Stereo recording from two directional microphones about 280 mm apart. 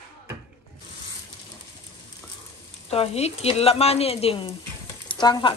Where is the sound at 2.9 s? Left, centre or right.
Left.